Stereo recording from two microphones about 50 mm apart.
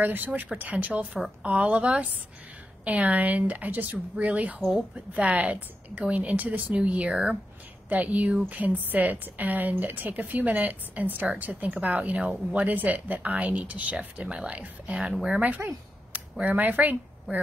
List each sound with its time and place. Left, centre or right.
0.0 s a woman's voice: right